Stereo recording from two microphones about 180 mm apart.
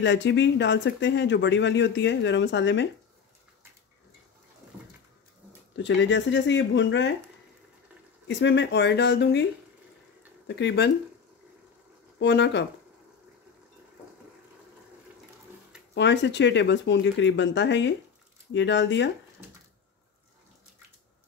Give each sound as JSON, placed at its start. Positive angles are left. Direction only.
{"t": 0.0, "sound": "speech", "side_deg": 80}
{"t": 5.8, "sound": "speech", "side_deg": 80}
{"t": 8.3, "sound": "speech", "side_deg": 80}
{"t": 12.2, "sound": "speech", "side_deg": 75}
{"t": 15.9, "sound": "speech", "side_deg": 75}